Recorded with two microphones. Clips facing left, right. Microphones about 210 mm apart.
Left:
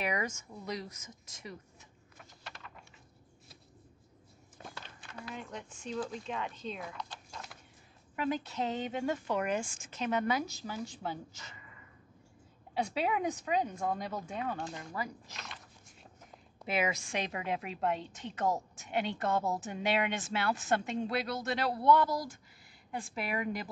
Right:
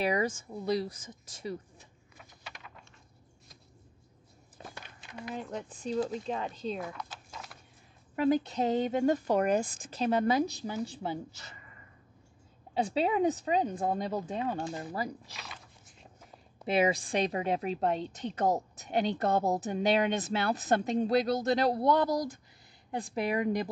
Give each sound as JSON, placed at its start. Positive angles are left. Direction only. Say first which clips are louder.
{"t": 0.0, "sound": "a woman's voice", "louder": "right 6 dB", "side_deg": -30}
{"t": 4.7, "sound": "a sound", "louder": "right 4 dB", "side_deg": -15}
{"t": 5.3, "sound": "a woman's voice", "louder": "right 7 dB", "side_deg": -35}
{"t": 7.0, "sound": "horse", "louder": "right 1 dB", "side_deg": -5}
{"t": 8.2, "sound": "a woman's voice", "louder": "right 7 dB", "side_deg": -35}
{"t": 12.7, "sound": "a woman's voice", "louder": "right 4 dB", "side_deg": -30}
{"t": 15.3, "sound": "biting", "louder": "right 1 dB", "side_deg": -5}
{"t": 16.7, "sound": "a woman's voice", "louder": "right 6 dB", "side_deg": -35}
{"t": 22.0, "sound": "a woman's voice", "louder": "right 4 dB", "side_deg": -20}
{"t": 22.8, "sound": "a woman's voice", "louder": "right 4 dB", "side_deg": -35}
{"t": 23.1, "sound": "a woman's voice", "louder": "right 7 dB", "side_deg": -20}